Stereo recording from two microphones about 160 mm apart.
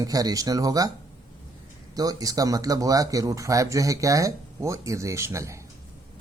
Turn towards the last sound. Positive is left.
turn(degrees=-20)  # may be behind; listen again after turning